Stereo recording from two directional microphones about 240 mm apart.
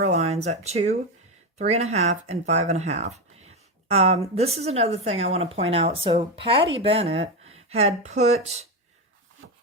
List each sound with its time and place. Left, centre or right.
0.0 s speech: right